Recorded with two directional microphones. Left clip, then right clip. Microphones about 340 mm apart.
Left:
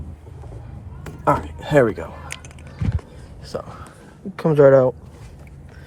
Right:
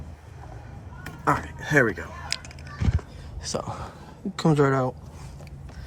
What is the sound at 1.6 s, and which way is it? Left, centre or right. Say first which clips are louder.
Speech: left 5 dB; centre.